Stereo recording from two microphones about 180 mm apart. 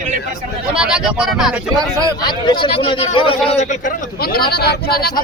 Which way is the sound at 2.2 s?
25° left (ahead or behind).